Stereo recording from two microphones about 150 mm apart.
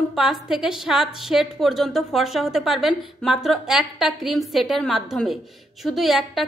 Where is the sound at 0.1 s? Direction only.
Centre (ahead or behind).